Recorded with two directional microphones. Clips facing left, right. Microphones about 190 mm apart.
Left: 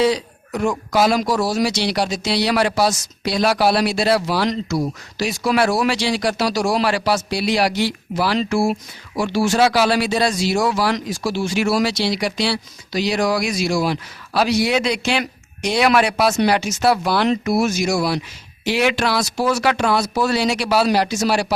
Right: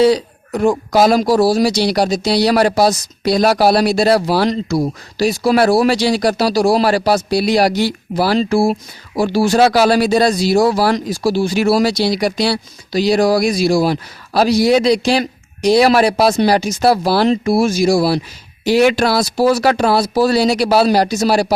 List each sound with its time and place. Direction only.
0.0 s speech: 35° right (ahead or behind)